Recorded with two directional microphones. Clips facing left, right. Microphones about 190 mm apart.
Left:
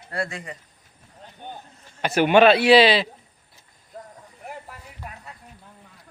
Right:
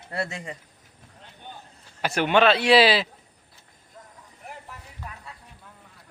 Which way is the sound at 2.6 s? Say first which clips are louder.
Left 3 dB; centre (ahead or behind).